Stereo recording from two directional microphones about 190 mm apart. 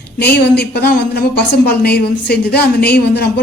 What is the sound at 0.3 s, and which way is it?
Speech, 60° left (ahead or behind).